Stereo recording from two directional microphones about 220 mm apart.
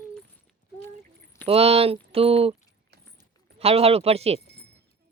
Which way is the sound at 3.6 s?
25° right (ahead or behind).